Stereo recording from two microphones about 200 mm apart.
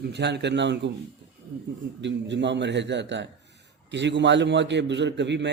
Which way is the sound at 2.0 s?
65° right (ahead or behind).